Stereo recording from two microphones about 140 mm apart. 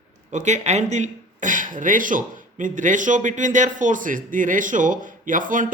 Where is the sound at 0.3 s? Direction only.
55° right (ahead or behind).